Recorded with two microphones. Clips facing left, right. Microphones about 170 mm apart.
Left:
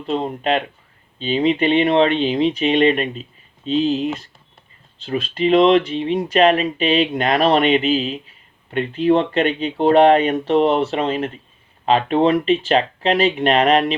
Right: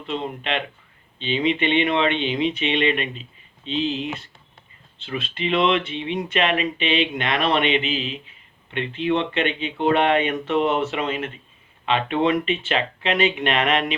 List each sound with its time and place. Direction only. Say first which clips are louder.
0.0 s speech: left 6 dB; 40° left (ahead or behind)